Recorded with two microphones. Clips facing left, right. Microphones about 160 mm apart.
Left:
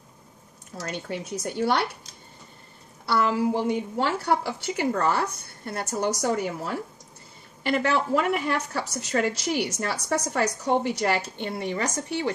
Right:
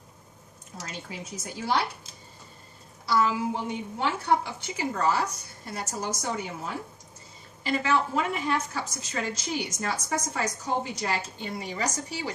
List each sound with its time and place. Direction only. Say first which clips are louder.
0.8 s speech: left 7 dB; 65° left (ahead or behind)
3.1 s a woman's voice: left 2 dB; 60° left (ahead or behind)